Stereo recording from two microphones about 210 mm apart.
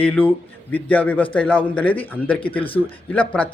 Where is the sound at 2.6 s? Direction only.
25° left (ahead or behind).